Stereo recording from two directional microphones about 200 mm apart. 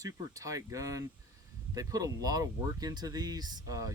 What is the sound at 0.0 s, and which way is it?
Speech, 15° right (ahead or behind).